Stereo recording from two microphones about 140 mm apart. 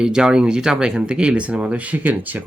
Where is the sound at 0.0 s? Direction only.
5° right (ahead or behind).